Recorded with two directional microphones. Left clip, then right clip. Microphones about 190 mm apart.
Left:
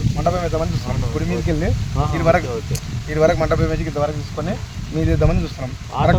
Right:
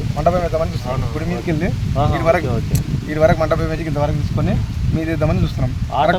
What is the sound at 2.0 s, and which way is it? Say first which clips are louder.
Speech: right 6 dB; 65° right (ahead or behind).